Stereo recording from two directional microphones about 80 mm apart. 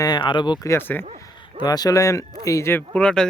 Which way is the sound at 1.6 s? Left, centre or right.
Left.